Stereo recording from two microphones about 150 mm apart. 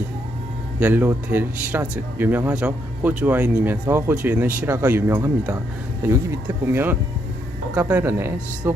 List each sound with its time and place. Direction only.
0.8 s speech: 10° right (ahead or behind)